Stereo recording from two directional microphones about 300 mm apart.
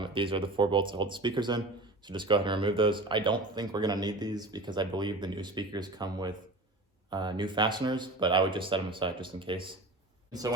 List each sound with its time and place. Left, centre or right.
0.0 s speech: centre